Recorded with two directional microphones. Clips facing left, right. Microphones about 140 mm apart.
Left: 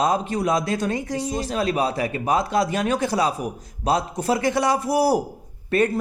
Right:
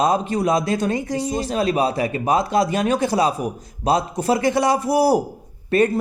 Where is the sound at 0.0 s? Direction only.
25° right (ahead or behind).